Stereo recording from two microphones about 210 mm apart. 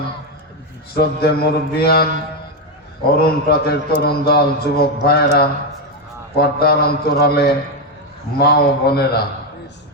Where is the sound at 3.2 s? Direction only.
45° left (ahead or behind).